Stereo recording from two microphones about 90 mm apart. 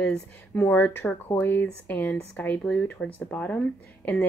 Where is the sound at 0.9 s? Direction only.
20° left (ahead or behind).